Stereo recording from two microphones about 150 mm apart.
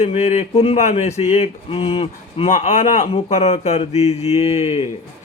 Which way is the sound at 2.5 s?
50° left (ahead or behind).